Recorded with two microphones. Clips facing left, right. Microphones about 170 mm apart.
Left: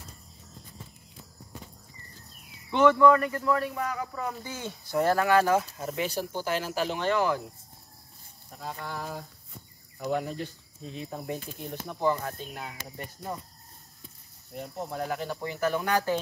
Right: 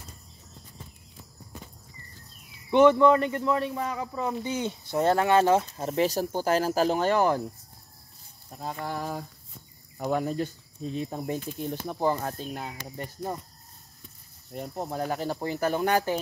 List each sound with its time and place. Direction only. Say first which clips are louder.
2.7 s speech: right 2 dB; 20° right (ahead or behind); by 7.4 s 40° right (ahead or behind)
8.5 s a sound: right 4 dB; 35° right (ahead or behind)
11.0 s speech: right 3 dB; 35° right (ahead or behind)
14.8 s speech: right 2 dB; 35° right (ahead or behind); by 16.2 s 20° right (ahead or behind)